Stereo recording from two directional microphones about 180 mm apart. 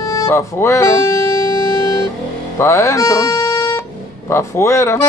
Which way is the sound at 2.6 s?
15° left (ahead or behind).